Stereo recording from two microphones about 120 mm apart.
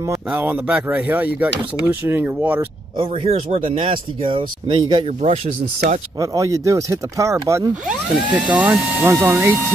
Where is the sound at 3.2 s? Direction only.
60° right (ahead or behind); by 5.0 s 40° right (ahead or behind).